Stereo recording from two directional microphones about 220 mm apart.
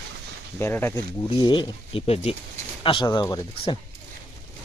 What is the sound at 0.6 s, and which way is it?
Speech, 10° left (ahead or behind).